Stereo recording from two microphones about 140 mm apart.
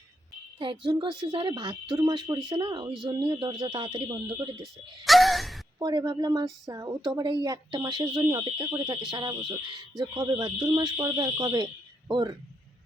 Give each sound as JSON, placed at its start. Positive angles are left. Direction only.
{"t": 0.6, "sound": "speech", "side_deg": -35}
{"t": 4.6, "sound": "speech", "side_deg": 0}
{"t": 5.8, "sound": "speech", "side_deg": -30}